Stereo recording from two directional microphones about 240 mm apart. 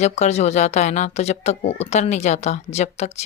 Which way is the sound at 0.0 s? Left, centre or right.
Left.